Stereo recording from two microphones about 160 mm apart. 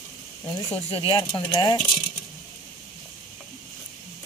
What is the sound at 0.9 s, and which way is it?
Speech, 30° left (ahead or behind).